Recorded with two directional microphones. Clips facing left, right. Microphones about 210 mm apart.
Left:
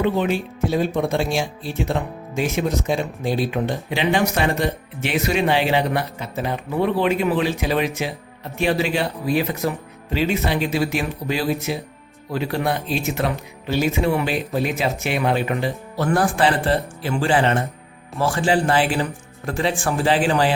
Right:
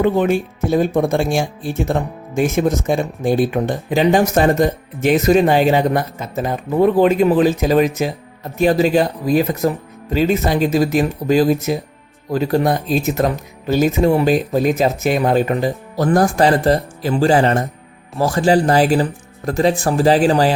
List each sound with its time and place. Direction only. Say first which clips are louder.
0.0 s speech: right 5 dB; 45° right (ahead or behind)